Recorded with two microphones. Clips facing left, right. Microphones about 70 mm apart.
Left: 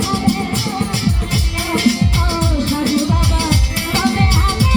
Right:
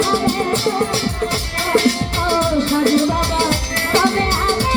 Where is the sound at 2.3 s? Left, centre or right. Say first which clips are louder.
Right 3 dB; right.